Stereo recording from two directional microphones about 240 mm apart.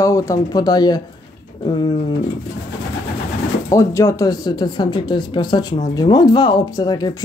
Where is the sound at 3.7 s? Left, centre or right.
Centre.